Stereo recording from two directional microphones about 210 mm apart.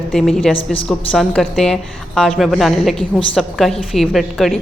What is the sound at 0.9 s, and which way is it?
A woman's voice, centre (ahead or behind).